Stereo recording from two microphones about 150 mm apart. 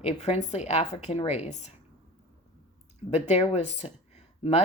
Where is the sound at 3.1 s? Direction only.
45° left (ahead or behind).